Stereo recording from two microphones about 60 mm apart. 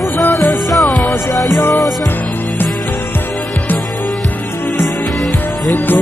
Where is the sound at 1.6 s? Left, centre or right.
Left.